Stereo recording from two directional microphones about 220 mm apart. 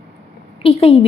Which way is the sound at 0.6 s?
25° left (ahead or behind).